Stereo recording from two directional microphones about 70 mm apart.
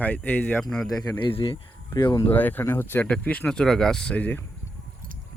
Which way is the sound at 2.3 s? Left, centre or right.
Left.